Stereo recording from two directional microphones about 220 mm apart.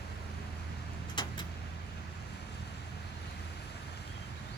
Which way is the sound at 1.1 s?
20° left (ahead or behind).